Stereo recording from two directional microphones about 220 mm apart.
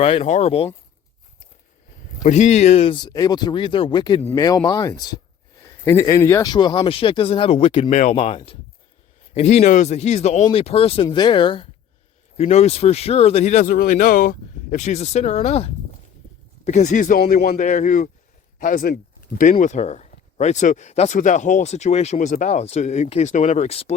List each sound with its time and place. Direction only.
0.0 s speech: 25° left (ahead or behind)
2.2 s speech: 30° left (ahead or behind)